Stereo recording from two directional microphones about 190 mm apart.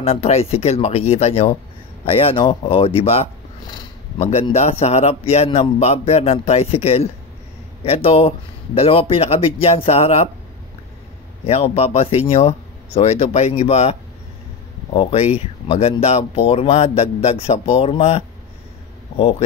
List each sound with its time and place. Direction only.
0.0 s a man's voice: 35° left (ahead or behind)
4.2 s a man's voice: 35° left (ahead or behind)
11.4 s a man's voice: 30° left (ahead or behind)
15.0 s a man's voice: 30° left (ahead or behind)